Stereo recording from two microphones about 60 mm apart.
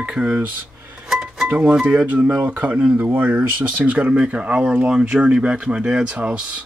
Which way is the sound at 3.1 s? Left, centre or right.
Right.